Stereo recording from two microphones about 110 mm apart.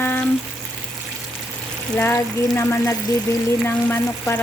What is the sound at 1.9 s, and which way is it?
Speech, 20° left (ahead or behind).